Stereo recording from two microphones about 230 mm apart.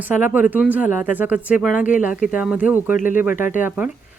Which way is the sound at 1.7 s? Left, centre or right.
Left.